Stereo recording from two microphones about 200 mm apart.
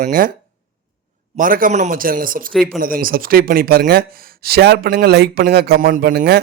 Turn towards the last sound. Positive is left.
turn(degrees=-50)  # may be behind; listen again after turning